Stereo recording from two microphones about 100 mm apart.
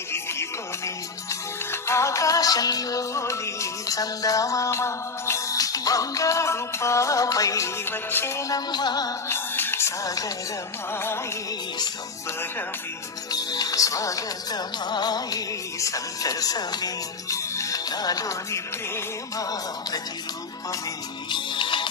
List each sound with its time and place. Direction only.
0.1 s music: 25° left (ahead or behind)
7.9 s music: 25° left (ahead or behind); by 9.1 s 40° left (ahead or behind)
9.3 s music: 25° left (ahead or behind)
10.9 s music: 25° left (ahead or behind)
13.3 s music: 40° left (ahead or behind)
21.2 s music: 50° left (ahead or behind)